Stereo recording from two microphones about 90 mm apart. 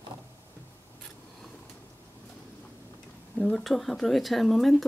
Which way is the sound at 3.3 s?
5° left (ahead or behind).